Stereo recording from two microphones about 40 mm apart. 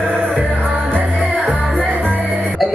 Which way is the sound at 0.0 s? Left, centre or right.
Right.